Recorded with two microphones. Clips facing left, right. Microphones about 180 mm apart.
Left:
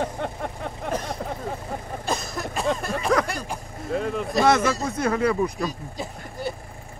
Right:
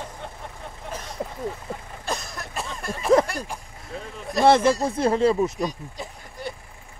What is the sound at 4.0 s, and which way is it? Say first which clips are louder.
Speech: left 11 dB; 70° left (ahead or behind).